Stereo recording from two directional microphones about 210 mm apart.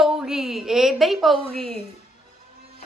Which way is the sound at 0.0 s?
5° right (ahead or behind).